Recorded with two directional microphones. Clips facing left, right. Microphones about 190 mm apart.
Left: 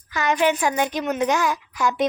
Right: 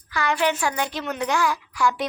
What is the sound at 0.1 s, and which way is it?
A child's voice, 20° left (ahead or behind).